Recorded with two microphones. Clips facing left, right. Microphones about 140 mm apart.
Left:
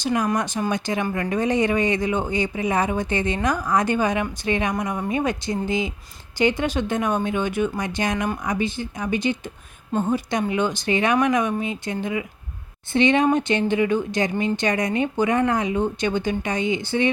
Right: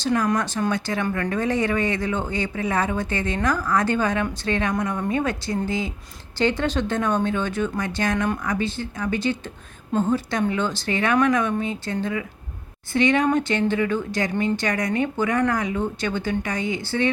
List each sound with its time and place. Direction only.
0.0 s speech: 15° left (ahead or behind)